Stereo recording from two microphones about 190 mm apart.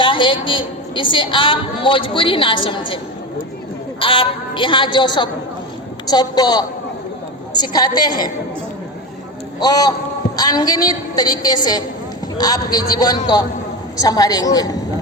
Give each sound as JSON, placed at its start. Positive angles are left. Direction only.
{"t": 0.0, "sound": "a woman's voice", "side_deg": 25}
{"t": 4.0, "sound": "a woman's voice", "side_deg": 25}
{"t": 9.6, "sound": "a woman's voice", "side_deg": 20}